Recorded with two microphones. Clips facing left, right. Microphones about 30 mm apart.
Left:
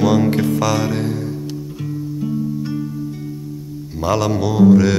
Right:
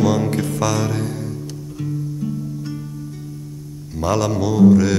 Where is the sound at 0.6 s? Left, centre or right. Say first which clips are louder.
Left 2 dB; centre.